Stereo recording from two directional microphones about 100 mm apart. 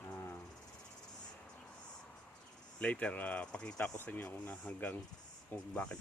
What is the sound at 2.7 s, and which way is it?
Speech, 15° left (ahead or behind).